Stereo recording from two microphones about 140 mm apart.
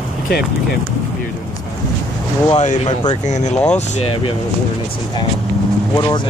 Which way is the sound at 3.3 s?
55° left (ahead or behind).